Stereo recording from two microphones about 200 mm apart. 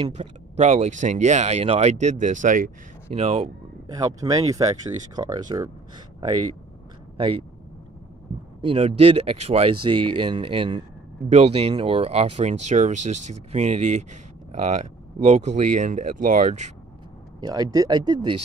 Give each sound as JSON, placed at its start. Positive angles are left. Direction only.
{"t": 0.0, "sound": "speech", "side_deg": -30}
{"t": 3.1, "sound": "speech", "side_deg": -30}
{"t": 3.9, "sound": "speech", "side_deg": -20}
{"t": 7.2, "sound": "speech", "side_deg": -25}
{"t": 8.5, "sound": "speech", "side_deg": -30}
{"t": 17.4, "sound": "speech", "side_deg": -20}